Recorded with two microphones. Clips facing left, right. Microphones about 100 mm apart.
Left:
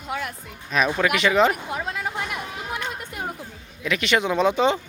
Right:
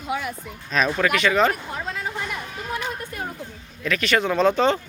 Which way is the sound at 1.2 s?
20° left (ahead or behind).